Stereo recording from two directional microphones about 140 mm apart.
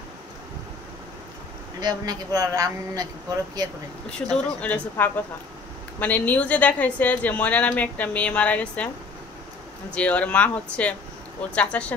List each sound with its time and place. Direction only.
1.8 s a man's voice: 30° right (ahead or behind)
4.3 s a woman's voice: 10° left (ahead or behind)
9.9 s a woman's voice: 10° left (ahead or behind)